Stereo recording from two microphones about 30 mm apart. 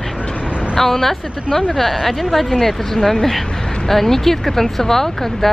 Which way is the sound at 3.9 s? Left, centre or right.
Centre.